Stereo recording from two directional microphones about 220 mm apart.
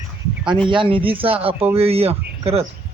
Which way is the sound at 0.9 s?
25° right (ahead or behind).